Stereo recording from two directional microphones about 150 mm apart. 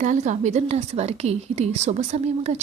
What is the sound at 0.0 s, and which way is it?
Speech, 55° right (ahead or behind).